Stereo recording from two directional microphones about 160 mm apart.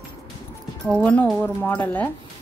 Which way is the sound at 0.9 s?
10° left (ahead or behind).